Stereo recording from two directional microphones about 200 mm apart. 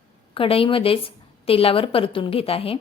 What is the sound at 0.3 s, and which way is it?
Speech, 25° left (ahead or behind).